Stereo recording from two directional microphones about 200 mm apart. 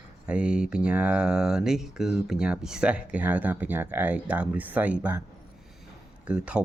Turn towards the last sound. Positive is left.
turn(degrees=-5)  # may be behind; listen again after turning